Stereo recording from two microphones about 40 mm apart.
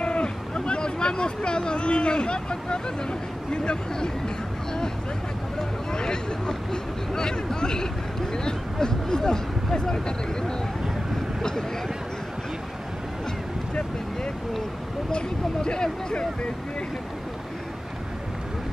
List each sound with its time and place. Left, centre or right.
0.0 s speech: left
5.6 s speech: centre
15.0 s speech: left